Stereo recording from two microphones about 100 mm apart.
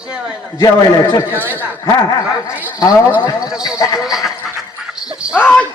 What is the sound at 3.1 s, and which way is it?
Speech, 40° left (ahead or behind).